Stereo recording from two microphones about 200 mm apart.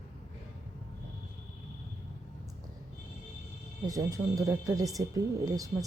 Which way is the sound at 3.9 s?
15° right (ahead or behind).